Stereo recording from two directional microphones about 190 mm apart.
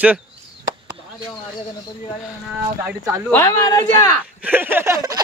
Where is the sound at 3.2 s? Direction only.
15° left (ahead or behind).